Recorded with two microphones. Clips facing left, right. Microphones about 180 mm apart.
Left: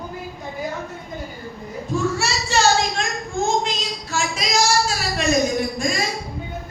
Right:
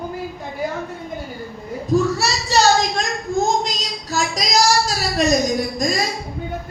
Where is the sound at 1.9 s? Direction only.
40° right (ahead or behind).